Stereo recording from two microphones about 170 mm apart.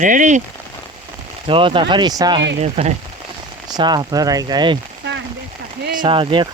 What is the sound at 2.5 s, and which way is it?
Speech, 40° right (ahead or behind).